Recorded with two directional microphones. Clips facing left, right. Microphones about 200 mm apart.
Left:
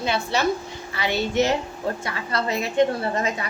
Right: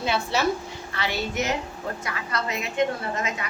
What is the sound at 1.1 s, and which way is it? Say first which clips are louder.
A woman's voice: left 7 dB; 30° left (ahead or behind).